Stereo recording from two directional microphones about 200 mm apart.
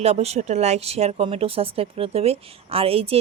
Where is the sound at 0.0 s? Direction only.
30° right (ahead or behind).